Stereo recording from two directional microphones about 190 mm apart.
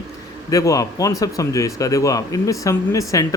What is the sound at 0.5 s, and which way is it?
Speech, 15° left (ahead or behind).